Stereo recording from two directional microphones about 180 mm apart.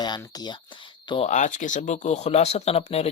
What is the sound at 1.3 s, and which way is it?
Speech, 45° left (ahead or behind).